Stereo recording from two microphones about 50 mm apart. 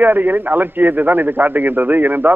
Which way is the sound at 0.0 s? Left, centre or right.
Right.